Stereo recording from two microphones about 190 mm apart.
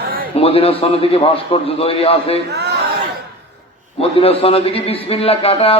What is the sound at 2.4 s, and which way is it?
Speech, 60° right (ahead or behind).